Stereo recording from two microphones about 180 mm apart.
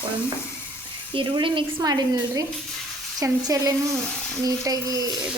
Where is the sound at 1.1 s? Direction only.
30° right (ahead or behind).